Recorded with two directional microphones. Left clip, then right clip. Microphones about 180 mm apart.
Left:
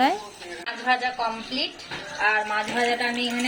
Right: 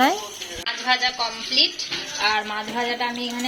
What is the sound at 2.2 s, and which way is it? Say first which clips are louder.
Speech: left 1 dB; centre (ahead or behind).